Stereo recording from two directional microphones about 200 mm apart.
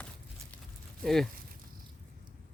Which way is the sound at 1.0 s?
Centre (ahead or behind).